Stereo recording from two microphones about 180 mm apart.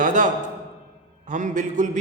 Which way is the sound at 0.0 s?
45° right (ahead or behind).